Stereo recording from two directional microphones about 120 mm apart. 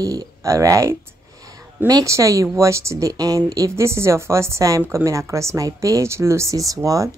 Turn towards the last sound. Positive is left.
turn(degrees=-30)  # may be behind; listen again after turning